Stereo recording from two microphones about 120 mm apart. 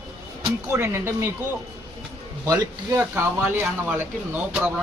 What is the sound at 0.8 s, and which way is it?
Speech, 25° right (ahead or behind).